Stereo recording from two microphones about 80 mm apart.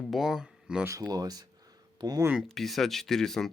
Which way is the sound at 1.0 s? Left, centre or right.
Right.